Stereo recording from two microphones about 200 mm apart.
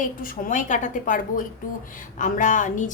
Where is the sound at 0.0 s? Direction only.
40° left (ahead or behind).